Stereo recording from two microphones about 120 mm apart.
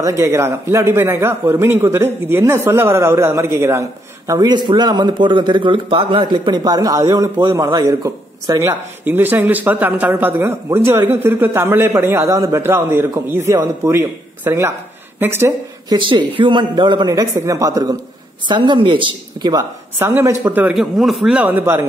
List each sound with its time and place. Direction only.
0.0 s speech: 25° right (ahead or behind)
4.3 s speech: 35° right (ahead or behind); by 15.5 s 20° right (ahead or behind)
15.9 s a man's voice: 40° right (ahead or behind)
18.7 s speech: 45° right (ahead or behind)
20.0 s speech: 20° right (ahead or behind)
20.7 s a man's voice: centre (ahead or behind); by 21.8 s 15° right (ahead or behind)